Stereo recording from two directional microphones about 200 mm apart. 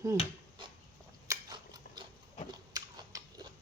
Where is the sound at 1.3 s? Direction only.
20° right (ahead or behind).